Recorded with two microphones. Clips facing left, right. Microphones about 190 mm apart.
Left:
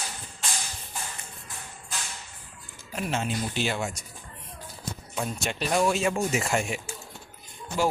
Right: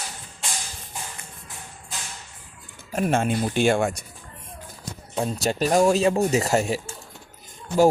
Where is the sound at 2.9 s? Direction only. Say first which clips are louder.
Right 7 dB; 50° right (ahead or behind).